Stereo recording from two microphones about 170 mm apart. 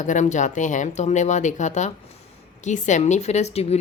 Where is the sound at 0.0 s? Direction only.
45° left (ahead or behind).